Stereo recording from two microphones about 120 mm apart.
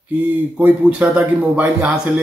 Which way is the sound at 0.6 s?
10° right (ahead or behind).